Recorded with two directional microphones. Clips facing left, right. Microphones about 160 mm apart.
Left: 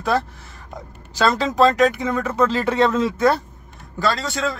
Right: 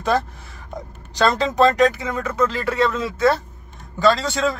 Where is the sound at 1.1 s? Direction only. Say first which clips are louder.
Right 1 dB; 5° left (ahead or behind).